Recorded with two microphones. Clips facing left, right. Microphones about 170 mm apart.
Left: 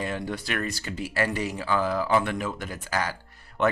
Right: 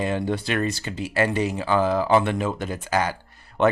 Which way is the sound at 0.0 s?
25° right (ahead or behind).